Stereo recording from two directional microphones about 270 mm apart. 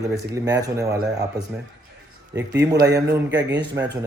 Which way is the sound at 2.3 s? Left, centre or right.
Centre.